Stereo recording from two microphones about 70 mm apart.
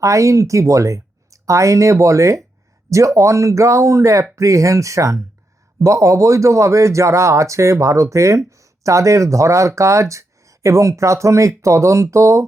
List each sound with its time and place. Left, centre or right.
0.0 s speech: right